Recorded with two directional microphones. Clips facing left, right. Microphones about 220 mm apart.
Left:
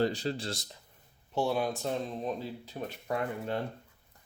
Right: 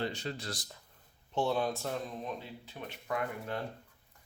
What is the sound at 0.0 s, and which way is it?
Speech, 35° left (ahead or behind).